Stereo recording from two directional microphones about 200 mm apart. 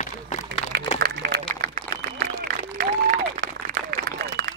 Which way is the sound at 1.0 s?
50° right (ahead or behind).